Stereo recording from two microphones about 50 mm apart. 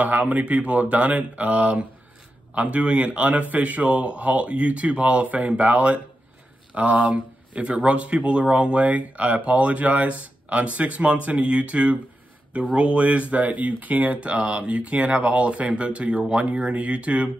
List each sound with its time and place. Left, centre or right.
0.0 s speech: right